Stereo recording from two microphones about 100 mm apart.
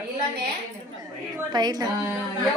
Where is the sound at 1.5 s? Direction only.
45° right (ahead or behind).